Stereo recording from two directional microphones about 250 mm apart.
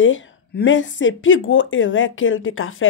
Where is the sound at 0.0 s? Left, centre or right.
Left.